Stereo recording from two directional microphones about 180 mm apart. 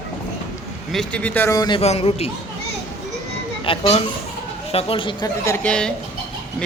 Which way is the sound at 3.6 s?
30° left (ahead or behind).